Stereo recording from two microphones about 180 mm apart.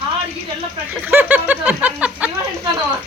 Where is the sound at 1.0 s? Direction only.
10° right (ahead or behind).